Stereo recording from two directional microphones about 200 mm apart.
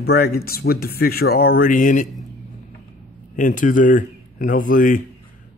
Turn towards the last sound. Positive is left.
turn(degrees=40)  # may be behind; listen again after turning